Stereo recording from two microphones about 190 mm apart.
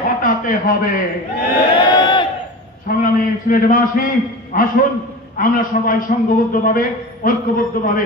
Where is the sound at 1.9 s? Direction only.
25° left (ahead or behind).